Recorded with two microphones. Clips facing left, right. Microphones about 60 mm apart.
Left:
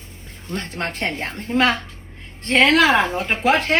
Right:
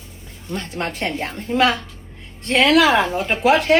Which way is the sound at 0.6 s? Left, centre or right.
Left.